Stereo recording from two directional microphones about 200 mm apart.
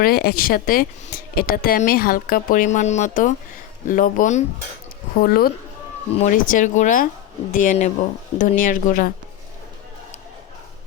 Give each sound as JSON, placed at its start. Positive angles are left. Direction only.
{"t": 0.0, "sound": "speech", "side_deg": 50}
{"t": 5.1, "sound": "speech", "side_deg": 50}